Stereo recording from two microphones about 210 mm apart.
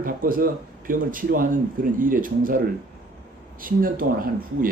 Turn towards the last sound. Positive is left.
turn(degrees=-40)  # may be behind; listen again after turning